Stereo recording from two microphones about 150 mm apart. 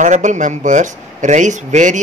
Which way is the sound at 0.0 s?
55° right (ahead or behind).